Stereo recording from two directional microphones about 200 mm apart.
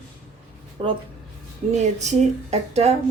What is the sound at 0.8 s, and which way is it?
A woman's voice, 30° right (ahead or behind).